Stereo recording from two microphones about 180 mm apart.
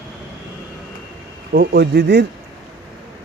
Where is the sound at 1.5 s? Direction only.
60° right (ahead or behind).